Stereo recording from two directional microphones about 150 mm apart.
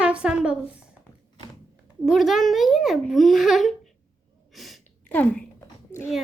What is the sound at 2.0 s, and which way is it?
A child's voice, centre (ahead or behind).